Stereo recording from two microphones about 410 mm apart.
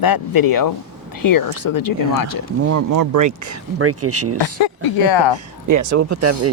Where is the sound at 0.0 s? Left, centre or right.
Left.